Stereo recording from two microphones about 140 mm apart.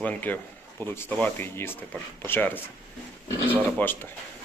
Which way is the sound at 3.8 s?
10° left (ahead or behind).